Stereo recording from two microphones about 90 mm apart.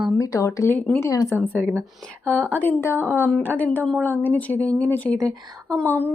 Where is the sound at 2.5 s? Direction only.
20° left (ahead or behind).